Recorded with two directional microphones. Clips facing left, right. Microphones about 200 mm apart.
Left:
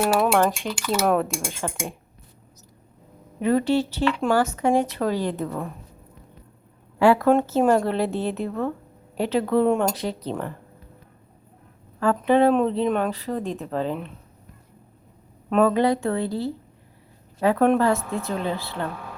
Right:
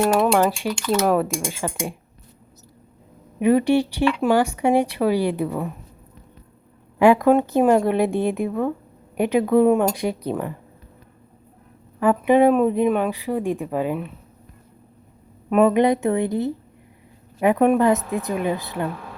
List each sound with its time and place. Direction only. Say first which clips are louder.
0.0 s cutlery: right 3 dB; 5° left (ahead or behind)
0.3 s speech: right 2 dB; 10° right (ahead or behind)
0.9 s cutlery: right 1 dB; centre (ahead or behind)
1.5 s speech: right 3 dB; 5° right (ahead or behind)
3.4 s speech: right 4 dB; 15° right (ahead or behind)
7.0 s speech: right 2 dB; 15° right (ahead or behind)
11.9 s speech: right 3 dB; 15° right (ahead or behind)
15.6 s a woman's voice: right 3 dB; 20° right (ahead or behind)